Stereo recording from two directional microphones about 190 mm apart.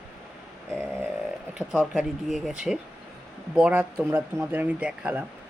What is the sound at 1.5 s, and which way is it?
Speech, centre (ahead or behind).